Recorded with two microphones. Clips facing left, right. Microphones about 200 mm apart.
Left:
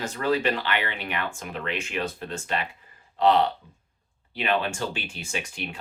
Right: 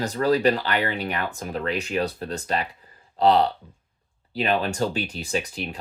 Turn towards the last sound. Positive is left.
turn(degrees=-35)  # may be behind; listen again after turning